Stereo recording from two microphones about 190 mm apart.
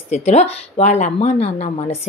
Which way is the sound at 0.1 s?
35° left (ahead or behind).